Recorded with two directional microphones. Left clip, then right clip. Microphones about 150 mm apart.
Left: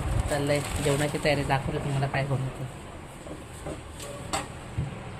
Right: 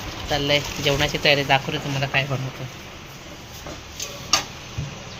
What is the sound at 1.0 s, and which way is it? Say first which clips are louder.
Speech: right 7 dB; 15° right (ahead or behind).